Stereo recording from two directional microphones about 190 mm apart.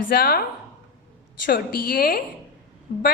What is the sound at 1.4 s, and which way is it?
Speech, 50° left (ahead or behind).